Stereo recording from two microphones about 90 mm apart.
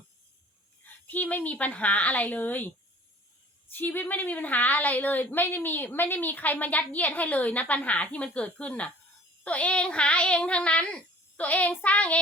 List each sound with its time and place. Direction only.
1.0 s a woman's voice: 20° left (ahead or behind)